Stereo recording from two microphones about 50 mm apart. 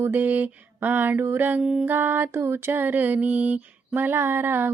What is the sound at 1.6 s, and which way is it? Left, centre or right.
Music, centre.